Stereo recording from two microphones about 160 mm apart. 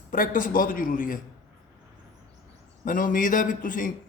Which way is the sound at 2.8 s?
55° left (ahead or behind).